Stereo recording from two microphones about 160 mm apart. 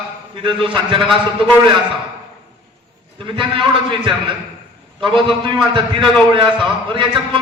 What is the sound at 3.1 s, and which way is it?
A man's voice, 30° right (ahead or behind).